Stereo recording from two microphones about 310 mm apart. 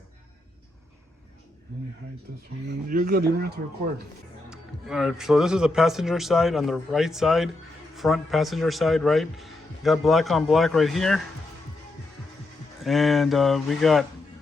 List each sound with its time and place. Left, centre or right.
2.6 s speech: right
4.4 s speech: centre
12.8 s speech: centre